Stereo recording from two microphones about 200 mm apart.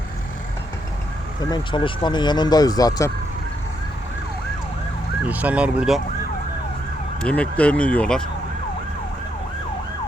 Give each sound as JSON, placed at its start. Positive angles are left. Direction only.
{"t": 1.4, "sound": "speech", "side_deg": 20}
{"t": 5.2, "sound": "speech", "side_deg": -10}
{"t": 7.2, "sound": "speech", "side_deg": 5}